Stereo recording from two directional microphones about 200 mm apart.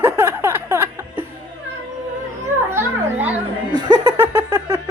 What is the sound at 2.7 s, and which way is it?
Children playing, 10° right (ahead or behind).